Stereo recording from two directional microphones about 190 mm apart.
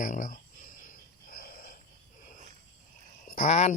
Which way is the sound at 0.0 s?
45° left (ahead or behind).